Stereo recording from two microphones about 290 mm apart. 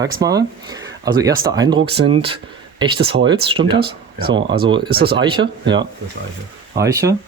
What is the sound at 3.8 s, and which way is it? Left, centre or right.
Speech, right.